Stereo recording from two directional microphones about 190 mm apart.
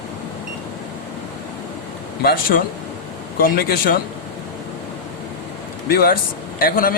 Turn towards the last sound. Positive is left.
turn(degrees=50)  # may be behind; listen again after turning